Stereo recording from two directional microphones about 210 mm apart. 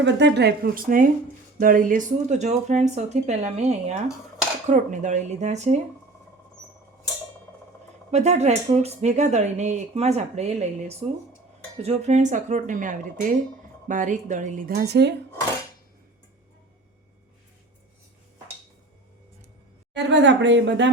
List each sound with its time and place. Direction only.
0.0 s speech: 55° right (ahead or behind); by 5.8 s 35° right (ahead or behind)
8.1 s speech: 30° right (ahead or behind); by 15.1 s 50° right (ahead or behind)
19.9 s a woman's voice: 55° right (ahead or behind)